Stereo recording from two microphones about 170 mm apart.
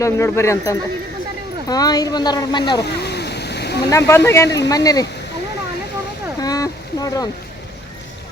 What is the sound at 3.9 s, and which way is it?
Speech, 15° left (ahead or behind).